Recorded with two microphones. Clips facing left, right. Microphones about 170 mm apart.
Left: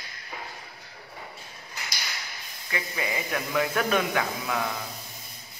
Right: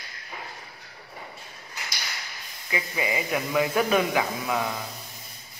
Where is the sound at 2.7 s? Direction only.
5° right (ahead or behind).